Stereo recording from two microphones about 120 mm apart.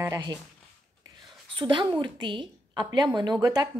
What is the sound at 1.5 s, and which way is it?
A woman's voice, 40° right (ahead or behind).